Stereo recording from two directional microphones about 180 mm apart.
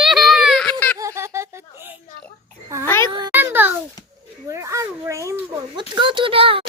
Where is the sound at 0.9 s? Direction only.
15° right (ahead or behind).